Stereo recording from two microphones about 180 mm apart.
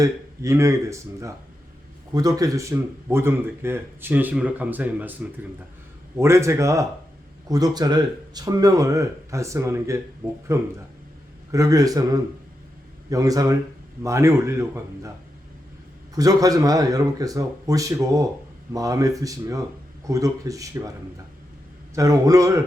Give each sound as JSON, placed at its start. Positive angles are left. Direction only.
{"t": 0.0, "sound": "speech", "side_deg": -15}
{"t": 6.1, "sound": "speech", "side_deg": -15}
{"t": 16.1, "sound": "speech", "side_deg": -20}
{"t": 21.9, "sound": "speech", "side_deg": -20}